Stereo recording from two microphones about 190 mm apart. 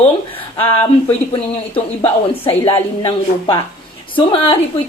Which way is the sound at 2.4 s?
25° left (ahead or behind).